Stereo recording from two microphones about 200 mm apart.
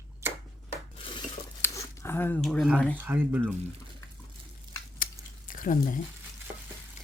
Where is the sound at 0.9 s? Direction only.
25° left (ahead or behind).